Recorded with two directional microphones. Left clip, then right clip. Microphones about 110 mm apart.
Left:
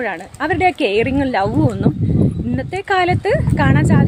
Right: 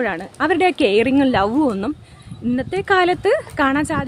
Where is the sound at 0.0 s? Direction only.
35° right (ahead or behind).